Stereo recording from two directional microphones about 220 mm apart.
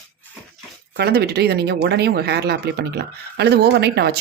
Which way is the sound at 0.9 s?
45° right (ahead or behind).